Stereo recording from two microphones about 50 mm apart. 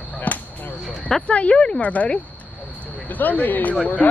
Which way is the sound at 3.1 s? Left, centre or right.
Left.